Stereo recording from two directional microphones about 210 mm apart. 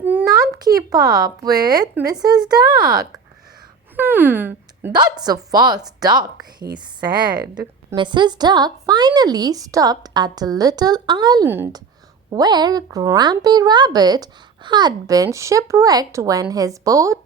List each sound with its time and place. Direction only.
0.0 s a woman's voice: 10° right (ahead or behind)
7.4 s a woman's voice: 10° right (ahead or behind)
7.9 s a woman's voice: 20° right (ahead or behind)